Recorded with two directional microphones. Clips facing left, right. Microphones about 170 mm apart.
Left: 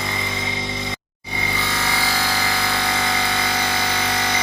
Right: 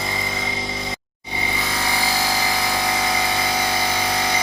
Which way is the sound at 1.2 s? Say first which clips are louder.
Even; 15° right (ahead or behind).